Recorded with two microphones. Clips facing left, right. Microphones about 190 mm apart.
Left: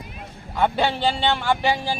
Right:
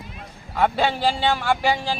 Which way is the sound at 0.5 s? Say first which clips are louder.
Even; 5° right (ahead or behind).